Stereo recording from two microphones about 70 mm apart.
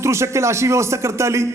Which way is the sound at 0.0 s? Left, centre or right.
Right.